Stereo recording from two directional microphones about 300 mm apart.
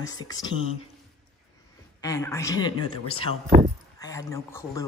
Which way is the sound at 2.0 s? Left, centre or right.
Centre.